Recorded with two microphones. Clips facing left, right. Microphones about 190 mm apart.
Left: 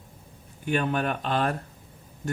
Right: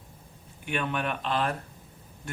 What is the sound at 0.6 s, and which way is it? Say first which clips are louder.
Speech: left 5 dB; 40° left (ahead or behind).